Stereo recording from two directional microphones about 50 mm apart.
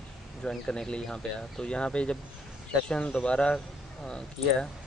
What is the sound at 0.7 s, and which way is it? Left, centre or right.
Speech, centre.